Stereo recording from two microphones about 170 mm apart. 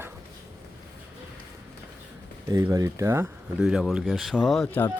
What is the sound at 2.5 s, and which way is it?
Speech, 20° right (ahead or behind).